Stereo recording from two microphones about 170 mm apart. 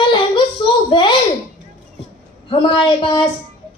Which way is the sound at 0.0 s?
30° left (ahead or behind).